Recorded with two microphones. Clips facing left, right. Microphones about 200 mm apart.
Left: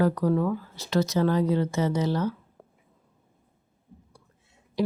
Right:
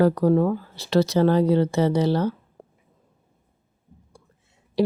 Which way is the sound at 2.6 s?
30° right (ahead or behind).